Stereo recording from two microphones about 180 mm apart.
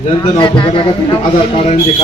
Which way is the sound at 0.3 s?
25° left (ahead or behind).